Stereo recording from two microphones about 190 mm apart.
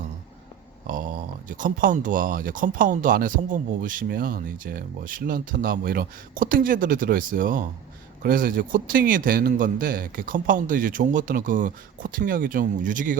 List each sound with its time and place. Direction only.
1.5 s speech: 45° right (ahead or behind)